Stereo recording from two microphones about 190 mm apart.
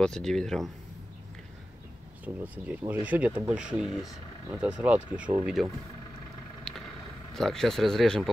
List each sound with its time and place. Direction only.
0.0 s speech: 5° left (ahead or behind)
2.2 s speech: 10° right (ahead or behind)
3.8 s speech: 20° left (ahead or behind)
4.5 s speech: 5° right (ahead or behind)
6.7 s vehicle: 5° left (ahead or behind)
7.3 s speech: centre (ahead or behind)